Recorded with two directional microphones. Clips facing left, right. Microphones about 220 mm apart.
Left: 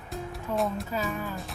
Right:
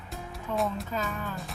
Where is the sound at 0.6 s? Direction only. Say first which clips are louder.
Left 1 dB; centre (ahead or behind).